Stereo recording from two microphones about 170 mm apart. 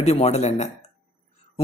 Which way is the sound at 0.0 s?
40° left (ahead or behind).